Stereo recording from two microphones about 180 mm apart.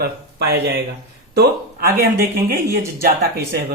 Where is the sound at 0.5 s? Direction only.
65° right (ahead or behind).